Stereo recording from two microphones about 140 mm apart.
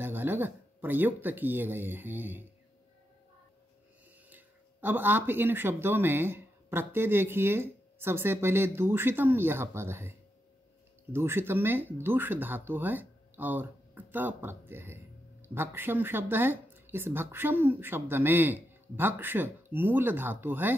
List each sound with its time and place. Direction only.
0.0 s speech: 15° right (ahead or behind)
4.3 s speech: 15° right (ahead or behind)